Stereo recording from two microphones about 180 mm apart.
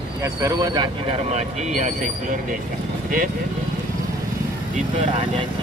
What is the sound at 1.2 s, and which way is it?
Speech, 40° right (ahead or behind).